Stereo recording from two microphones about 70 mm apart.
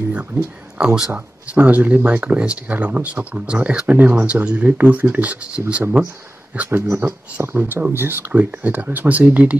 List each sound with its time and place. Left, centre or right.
0.1 s speech: centre
1.1 s speech: right